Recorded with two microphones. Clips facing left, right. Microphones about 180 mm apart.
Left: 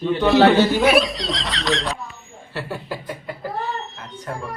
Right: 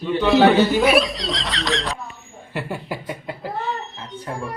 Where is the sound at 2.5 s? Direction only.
15° right (ahead or behind).